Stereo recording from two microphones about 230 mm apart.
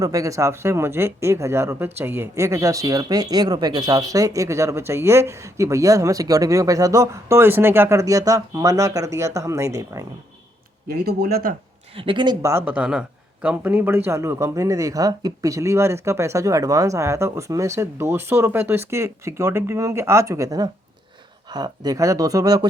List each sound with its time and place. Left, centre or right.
0.0 s speech: centre
10.8 s speech: right
11.9 s speech: right